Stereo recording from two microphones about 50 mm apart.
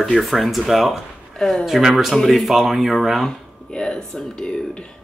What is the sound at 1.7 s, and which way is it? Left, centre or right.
Speech, centre.